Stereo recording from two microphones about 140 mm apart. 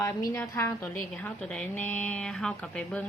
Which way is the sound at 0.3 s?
15° left (ahead or behind).